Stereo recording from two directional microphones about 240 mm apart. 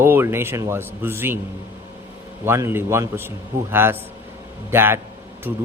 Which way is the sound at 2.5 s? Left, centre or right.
Centre.